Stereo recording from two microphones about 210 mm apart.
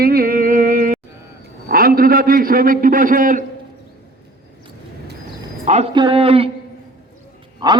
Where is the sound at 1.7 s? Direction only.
45° right (ahead or behind).